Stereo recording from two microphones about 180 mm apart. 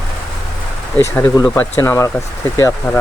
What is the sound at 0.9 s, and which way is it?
Speech, 15° left (ahead or behind).